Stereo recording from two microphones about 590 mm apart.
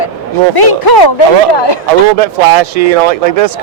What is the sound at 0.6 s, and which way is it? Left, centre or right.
Speech, left.